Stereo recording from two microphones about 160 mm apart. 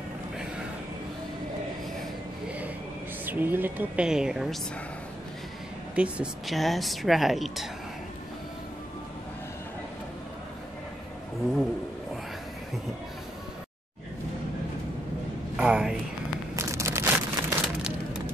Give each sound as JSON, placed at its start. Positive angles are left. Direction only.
{"t": 3.3, "sound": "a woman's voice", "side_deg": -10}
{"t": 5.9, "sound": "speech", "side_deg": -5}
{"t": 15.5, "sound": "speech", "side_deg": -5}
{"t": 16.5, "sound": "a sound", "side_deg": -15}